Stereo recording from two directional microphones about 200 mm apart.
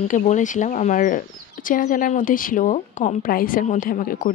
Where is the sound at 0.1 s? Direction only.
40° left (ahead or behind).